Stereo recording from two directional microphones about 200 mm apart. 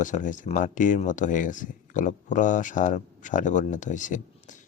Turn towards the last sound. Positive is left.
turn(degrees=40)  # may be behind; listen again after turning